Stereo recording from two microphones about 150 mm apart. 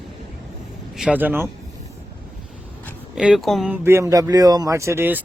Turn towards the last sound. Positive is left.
turn(degrees=-15)  # may be behind; listen again after turning